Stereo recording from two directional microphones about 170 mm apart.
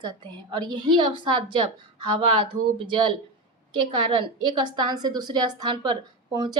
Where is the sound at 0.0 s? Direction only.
25° right (ahead or behind).